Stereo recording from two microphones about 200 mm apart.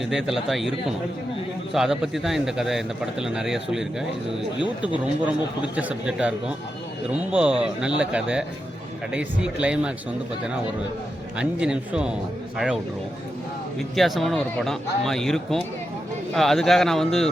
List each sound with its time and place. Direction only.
0.0 s speech: centre (ahead or behind)
4.6 s speech: 25° left (ahead or behind)
5.7 s speech: 5° right (ahead or behind)
11.3 s speech: 5° right (ahead or behind)
13.9 s speech: centre (ahead or behind)